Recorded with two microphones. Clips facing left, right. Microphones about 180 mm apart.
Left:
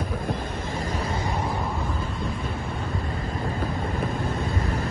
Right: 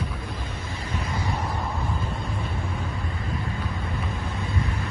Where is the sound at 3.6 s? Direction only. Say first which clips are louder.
Left 4 dB; 40° left (ahead or behind).